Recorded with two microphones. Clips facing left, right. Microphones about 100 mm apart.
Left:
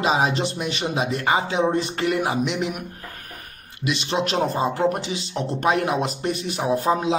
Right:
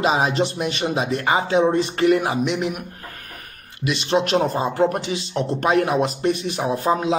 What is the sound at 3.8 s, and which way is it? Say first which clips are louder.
A man's voice: right 3 dB; 40° right (ahead or behind).